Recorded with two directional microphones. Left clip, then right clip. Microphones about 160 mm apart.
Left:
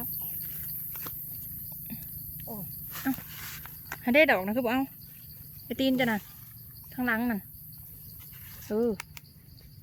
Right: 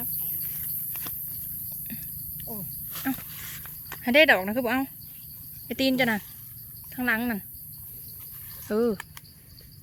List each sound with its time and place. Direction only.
2.9 s dog: 5° left (ahead or behind)
3.6 s a sound: centre (ahead or behind)
4.0 s speech: 10° left (ahead or behind)
6.9 s speech: 15° left (ahead or behind)
8.6 s speech: 5° right (ahead or behind)